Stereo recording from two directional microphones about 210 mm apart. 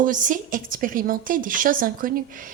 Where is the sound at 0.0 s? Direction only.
40° right (ahead or behind).